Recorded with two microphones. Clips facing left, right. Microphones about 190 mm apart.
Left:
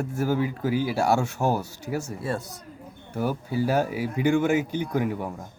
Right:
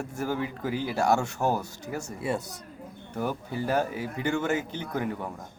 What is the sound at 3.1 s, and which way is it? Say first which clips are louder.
Speech: left 4 dB; 5° left (ahead or behind).